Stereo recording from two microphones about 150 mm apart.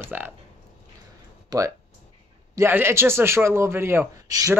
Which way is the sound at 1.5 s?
25° right (ahead or behind).